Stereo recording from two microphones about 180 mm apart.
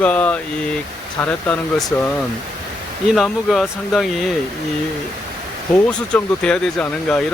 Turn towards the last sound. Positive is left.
turn(degrees=5)  # may be behind; listen again after turning